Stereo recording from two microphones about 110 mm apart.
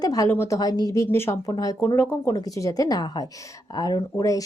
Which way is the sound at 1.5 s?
35° left (ahead or behind).